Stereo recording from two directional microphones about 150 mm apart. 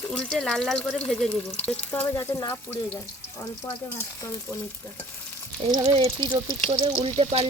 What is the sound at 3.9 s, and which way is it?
Stir, 20° left (ahead or behind).